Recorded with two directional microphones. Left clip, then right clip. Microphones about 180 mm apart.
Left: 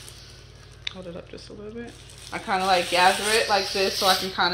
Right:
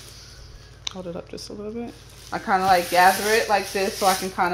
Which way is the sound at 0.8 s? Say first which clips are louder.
Right 3 dB; 55° right (ahead or behind).